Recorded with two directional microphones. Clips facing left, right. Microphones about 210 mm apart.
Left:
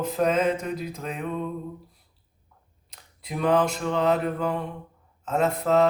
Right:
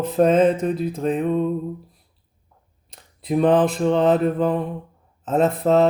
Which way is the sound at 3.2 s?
30° right (ahead or behind).